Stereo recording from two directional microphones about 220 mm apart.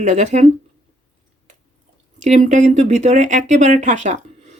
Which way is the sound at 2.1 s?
35° right (ahead or behind).